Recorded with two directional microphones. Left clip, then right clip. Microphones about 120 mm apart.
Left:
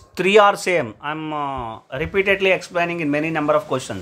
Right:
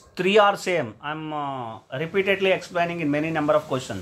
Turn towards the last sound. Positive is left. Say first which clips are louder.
# left 3 dB
turn(degrees=35)  # may be behind; listen again after turning